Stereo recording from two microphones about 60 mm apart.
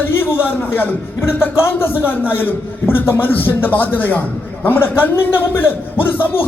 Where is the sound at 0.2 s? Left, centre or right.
Left.